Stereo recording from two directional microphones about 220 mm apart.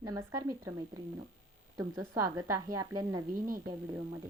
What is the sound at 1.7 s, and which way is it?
Speech, 15° right (ahead or behind).